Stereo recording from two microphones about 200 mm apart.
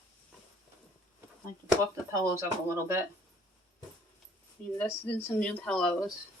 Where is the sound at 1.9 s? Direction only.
15° right (ahead or behind).